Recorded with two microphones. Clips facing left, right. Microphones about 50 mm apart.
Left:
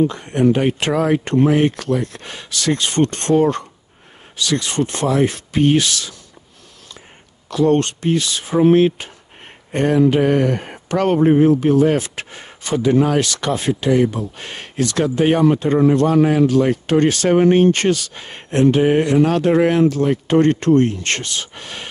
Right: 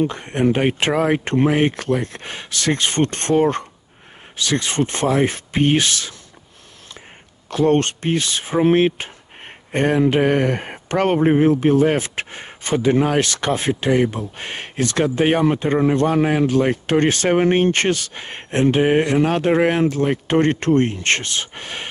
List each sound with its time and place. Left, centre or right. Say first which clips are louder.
0.1 s speech: left 3 dB; right
7.4 s speech: left 1 dB; right